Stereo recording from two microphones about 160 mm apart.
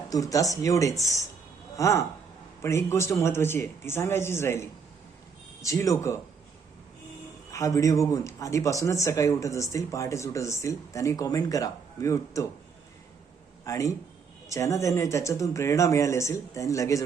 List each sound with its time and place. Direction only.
0.1 s a man's voice: 20° left (ahead or behind)
7.5 s speech: 20° left (ahead or behind)
13.7 s speech: 20° left (ahead or behind)